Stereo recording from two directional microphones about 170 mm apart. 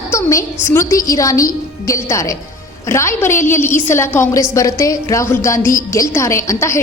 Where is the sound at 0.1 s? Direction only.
20° left (ahead or behind).